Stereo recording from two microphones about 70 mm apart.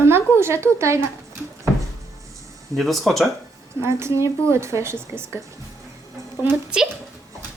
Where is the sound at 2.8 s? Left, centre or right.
Centre.